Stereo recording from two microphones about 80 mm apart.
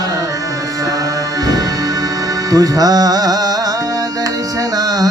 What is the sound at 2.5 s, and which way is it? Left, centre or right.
Music, right.